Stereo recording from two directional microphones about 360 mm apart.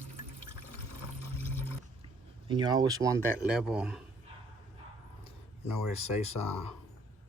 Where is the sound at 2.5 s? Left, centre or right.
Centre.